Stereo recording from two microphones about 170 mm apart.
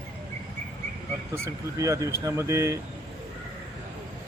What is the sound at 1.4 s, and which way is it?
Speech, 20° right (ahead or behind).